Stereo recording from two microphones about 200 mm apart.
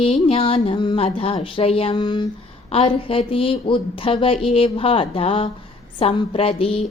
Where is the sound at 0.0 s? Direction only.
30° left (ahead or behind).